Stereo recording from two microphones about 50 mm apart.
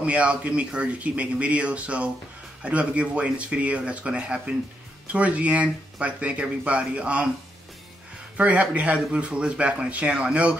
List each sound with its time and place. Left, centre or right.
0.0 s speech: right
8.4 s speech: right